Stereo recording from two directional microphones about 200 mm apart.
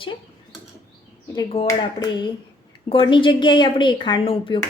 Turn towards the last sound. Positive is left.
turn(degrees=25)  # may be behind; listen again after turning